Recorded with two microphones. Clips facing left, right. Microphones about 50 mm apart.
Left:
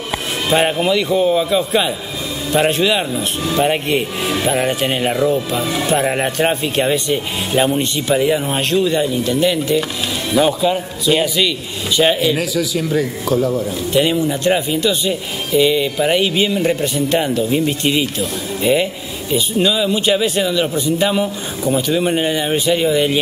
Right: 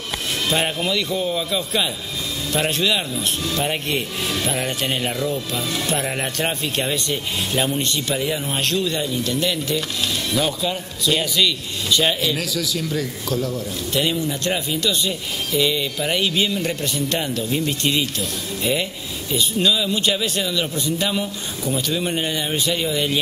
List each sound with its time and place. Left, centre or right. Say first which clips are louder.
0.5 s speech: left 8 dB; centre